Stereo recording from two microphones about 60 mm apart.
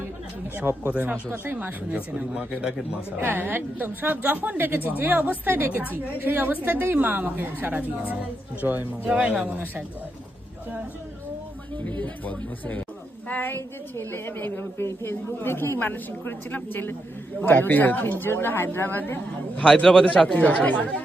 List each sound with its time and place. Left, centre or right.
0.5 s a woman's voice: right
1.9 s speech: centre
3.2 s a woman's voice: right
11.9 s a woman's voice: left
19.5 s a man's voice: centre
20.2 s speech: left